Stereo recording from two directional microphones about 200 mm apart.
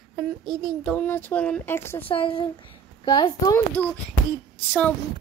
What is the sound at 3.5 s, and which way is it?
Speech, 10° left (ahead or behind).